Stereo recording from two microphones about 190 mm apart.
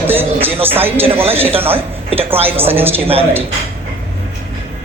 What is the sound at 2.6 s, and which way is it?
Speech, 10° right (ahead or behind).